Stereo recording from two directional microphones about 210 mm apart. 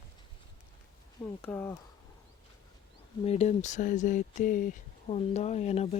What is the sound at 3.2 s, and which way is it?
Speech, 30° left (ahead or behind).